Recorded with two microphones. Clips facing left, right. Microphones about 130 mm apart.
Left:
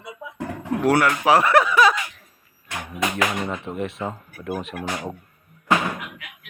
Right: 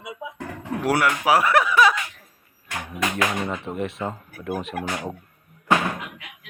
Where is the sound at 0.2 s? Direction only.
15° right (ahead or behind).